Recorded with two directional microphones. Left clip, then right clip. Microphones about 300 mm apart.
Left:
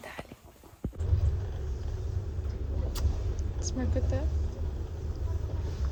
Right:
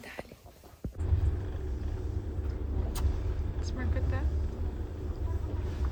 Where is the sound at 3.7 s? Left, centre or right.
Centre.